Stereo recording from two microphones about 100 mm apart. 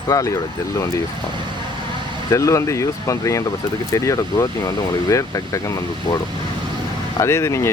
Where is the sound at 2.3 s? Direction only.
30° left (ahead or behind).